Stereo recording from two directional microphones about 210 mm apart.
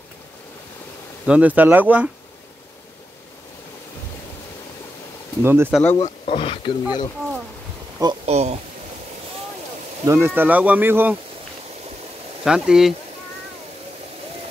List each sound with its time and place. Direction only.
1.2 s speech: 5° right (ahead or behind)
5.4 s speech: 10° right (ahead or behind)
5.9 s speech: 30° left (ahead or behind)
8.0 s speech: 25° right (ahead or behind)
10.0 s speech: 10° right (ahead or behind)
12.4 s speech: centre (ahead or behind)